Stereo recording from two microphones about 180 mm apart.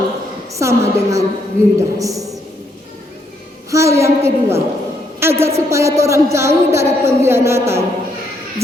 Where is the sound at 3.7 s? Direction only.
15° right (ahead or behind).